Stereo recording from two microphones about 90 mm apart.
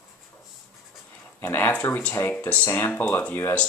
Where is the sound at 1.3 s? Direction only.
25° left (ahead or behind).